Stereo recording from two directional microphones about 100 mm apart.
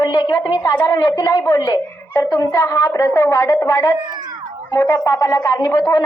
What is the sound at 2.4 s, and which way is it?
A man's voice, 35° left (ahead or behind).